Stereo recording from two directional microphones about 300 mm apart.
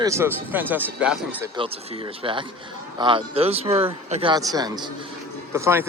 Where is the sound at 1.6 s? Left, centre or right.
Centre.